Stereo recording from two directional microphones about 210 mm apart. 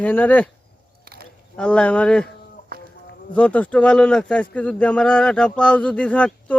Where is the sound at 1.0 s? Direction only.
45° right (ahead or behind).